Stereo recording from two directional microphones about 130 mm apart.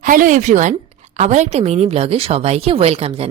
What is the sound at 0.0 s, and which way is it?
A woman's voice, 90° right.